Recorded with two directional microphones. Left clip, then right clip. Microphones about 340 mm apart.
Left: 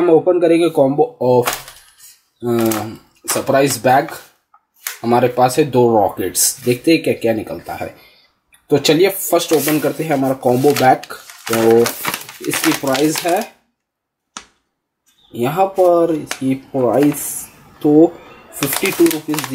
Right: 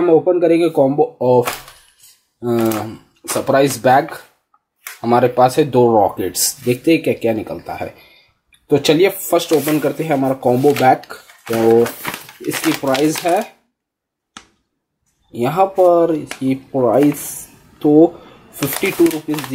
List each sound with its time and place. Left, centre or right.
0.0 s speech: centre
0.9 s speech: centre
1.2 s speech: centre
15.3 s speech: centre
17.8 s speech: right
18.6 s speech: centre